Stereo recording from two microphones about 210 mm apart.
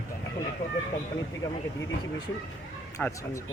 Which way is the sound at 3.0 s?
15° left (ahead or behind).